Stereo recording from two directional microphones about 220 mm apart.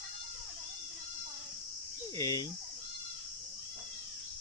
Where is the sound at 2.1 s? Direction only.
15° left (ahead or behind).